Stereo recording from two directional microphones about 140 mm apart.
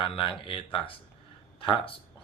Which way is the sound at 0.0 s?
40° left (ahead or behind).